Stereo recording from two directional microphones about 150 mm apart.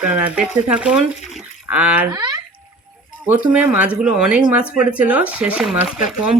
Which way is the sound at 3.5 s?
10° right (ahead or behind).